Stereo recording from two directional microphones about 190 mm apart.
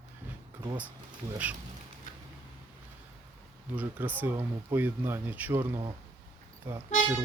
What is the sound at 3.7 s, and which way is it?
Speech, 10° right (ahead or behind).